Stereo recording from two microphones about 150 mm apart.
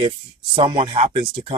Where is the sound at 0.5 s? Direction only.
35° right (ahead or behind).